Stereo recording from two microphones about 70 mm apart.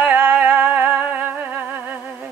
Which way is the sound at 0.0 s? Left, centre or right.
Right.